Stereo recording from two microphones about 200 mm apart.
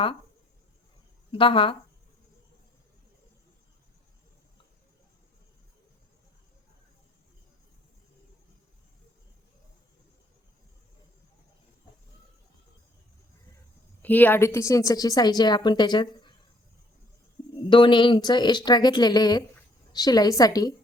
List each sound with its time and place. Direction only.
1.3 s speech: 25° left (ahead or behind)
14.0 s a woman's voice: 10° left (ahead or behind)
17.5 s speech: 25° left (ahead or behind)